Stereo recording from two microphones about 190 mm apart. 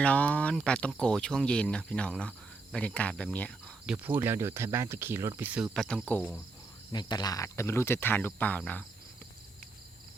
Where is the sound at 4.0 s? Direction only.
10° right (ahead or behind).